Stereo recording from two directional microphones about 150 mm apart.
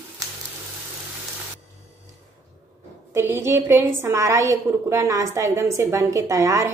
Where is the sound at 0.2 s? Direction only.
25° right (ahead or behind).